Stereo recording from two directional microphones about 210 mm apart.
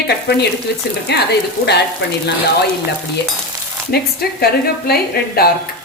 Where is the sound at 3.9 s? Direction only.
50° left (ahead or behind).